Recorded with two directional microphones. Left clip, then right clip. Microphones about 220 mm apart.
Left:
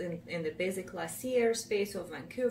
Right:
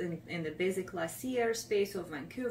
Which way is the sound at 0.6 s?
50° left (ahead or behind).